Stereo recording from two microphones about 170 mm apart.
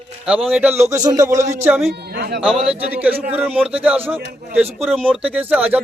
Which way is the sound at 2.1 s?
70° right (ahead or behind).